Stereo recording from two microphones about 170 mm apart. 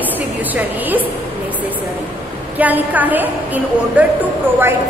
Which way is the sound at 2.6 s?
10° right (ahead or behind).